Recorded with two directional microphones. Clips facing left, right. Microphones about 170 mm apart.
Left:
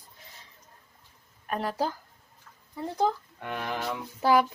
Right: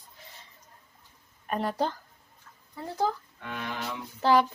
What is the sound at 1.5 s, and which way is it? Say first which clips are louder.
Speech: right 1 dB; centre (ahead or behind).